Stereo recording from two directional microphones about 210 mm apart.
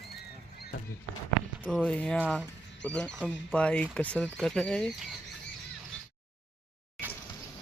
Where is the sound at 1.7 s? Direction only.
5° left (ahead or behind).